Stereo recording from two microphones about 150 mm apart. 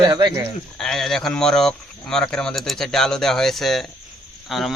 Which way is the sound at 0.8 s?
5° left (ahead or behind).